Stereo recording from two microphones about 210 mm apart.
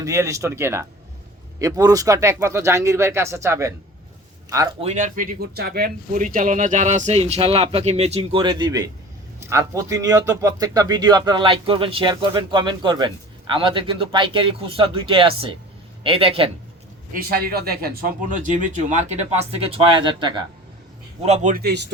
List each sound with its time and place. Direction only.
0.0 s a man's voice: 15° right (ahead or behind)
4.8 s a man's voice: 35° right (ahead or behind)
17.2 s speech: 45° right (ahead or behind); by 20.4 s 20° right (ahead or behind)
21.2 s speech: 35° right (ahead or behind); by 21.9 s 55° right (ahead or behind)